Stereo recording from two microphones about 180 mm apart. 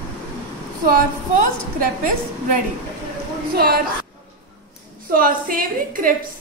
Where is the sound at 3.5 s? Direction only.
60° right (ahead or behind).